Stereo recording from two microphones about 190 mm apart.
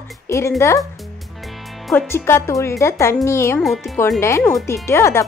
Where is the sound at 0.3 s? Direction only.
15° left (ahead or behind).